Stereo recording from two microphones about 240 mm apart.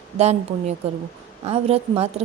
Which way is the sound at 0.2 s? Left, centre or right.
Right.